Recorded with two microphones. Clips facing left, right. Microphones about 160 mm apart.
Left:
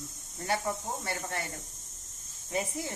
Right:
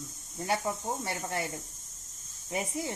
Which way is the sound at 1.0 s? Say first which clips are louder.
Right 2 dB; 25° right (ahead or behind).